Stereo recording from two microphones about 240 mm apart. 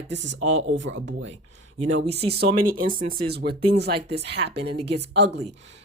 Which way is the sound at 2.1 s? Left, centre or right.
Right.